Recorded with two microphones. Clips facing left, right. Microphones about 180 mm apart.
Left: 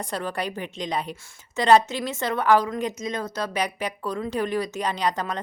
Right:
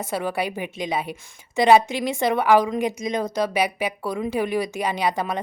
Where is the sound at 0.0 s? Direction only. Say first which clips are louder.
Right 4 dB; 10° right (ahead or behind).